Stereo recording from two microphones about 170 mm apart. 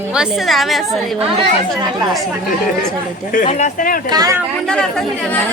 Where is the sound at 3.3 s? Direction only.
50° left (ahead or behind).